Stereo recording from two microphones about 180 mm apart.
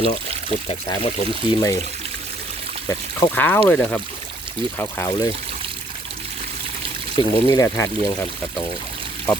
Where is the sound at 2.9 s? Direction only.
15° left (ahead or behind).